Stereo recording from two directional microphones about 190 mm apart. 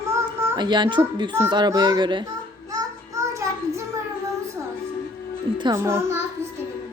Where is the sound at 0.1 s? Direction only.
20° right (ahead or behind).